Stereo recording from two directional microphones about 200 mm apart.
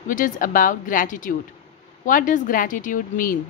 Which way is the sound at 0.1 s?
40° left (ahead or behind).